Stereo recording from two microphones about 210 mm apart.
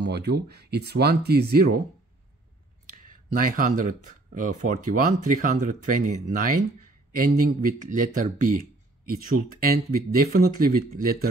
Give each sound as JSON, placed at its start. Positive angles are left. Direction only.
{"t": 0.0, "sound": "speech", "side_deg": -50}
{"t": 2.9, "sound": "speech", "side_deg": -40}